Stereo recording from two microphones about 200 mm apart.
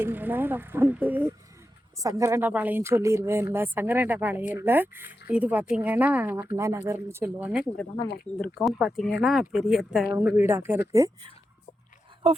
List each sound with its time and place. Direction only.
0.0 s speech: 10° right (ahead or behind)
12.2 s speech: 25° right (ahead or behind)